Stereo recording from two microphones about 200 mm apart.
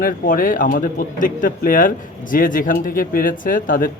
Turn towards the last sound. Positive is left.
turn(degrees=45)  # may be behind; listen again after turning